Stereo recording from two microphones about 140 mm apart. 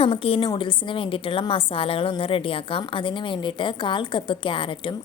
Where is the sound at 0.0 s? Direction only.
40° left (ahead or behind).